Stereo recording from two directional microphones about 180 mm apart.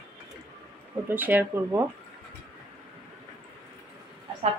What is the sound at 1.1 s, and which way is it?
Speech, 10° right (ahead or behind).